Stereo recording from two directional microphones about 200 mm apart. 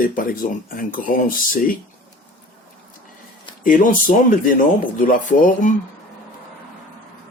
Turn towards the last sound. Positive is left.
turn(degrees=40)  # may be behind; listen again after turning